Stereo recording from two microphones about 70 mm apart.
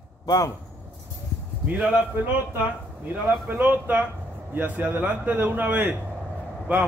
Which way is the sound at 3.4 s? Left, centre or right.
Right.